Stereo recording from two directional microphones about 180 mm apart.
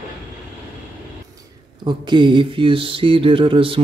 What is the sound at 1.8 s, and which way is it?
Speech, 25° right (ahead or behind).